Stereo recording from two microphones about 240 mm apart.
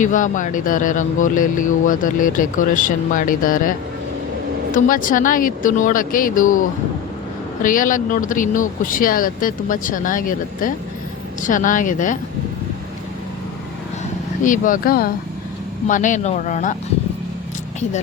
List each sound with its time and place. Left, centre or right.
0.0 s speech: left
14.4 s speech: left